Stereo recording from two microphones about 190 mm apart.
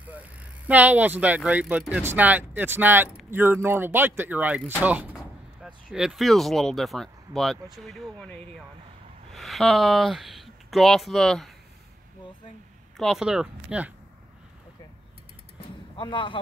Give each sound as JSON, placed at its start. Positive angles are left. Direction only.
{"t": 0.0, "sound": "speech", "side_deg": -10}
{"t": 4.8, "sound": "artillery fire", "side_deg": -10}
{"t": 5.9, "sound": "speech", "side_deg": -5}
{"t": 12.9, "sound": "speech", "side_deg": 0}
{"t": 16.0, "sound": "speech", "side_deg": 25}